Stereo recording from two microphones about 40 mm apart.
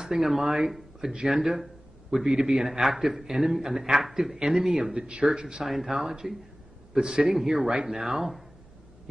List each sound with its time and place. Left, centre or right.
0.0 s speech: centre
1.1 s speech: centre
5.7 s a man's voice: centre